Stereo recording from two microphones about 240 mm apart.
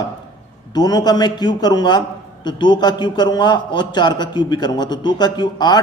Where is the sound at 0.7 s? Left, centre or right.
Centre.